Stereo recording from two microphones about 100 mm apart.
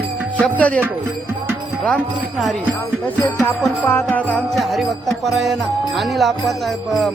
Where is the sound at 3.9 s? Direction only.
20° left (ahead or behind).